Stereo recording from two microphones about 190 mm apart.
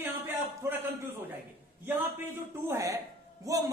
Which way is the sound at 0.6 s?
10° right (ahead or behind).